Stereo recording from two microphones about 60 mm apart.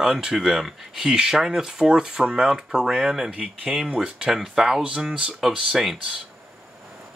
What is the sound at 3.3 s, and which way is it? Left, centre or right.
Speech, right.